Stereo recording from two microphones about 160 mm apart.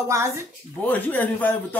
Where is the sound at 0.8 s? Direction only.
10° left (ahead or behind).